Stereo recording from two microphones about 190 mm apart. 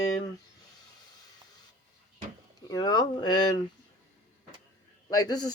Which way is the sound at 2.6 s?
20° left (ahead or behind).